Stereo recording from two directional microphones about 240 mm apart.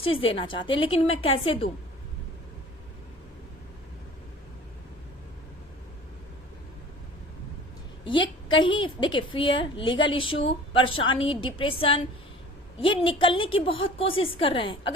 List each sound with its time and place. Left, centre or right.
0.0 s a woman's voice: left
8.4 s a woman's voice: centre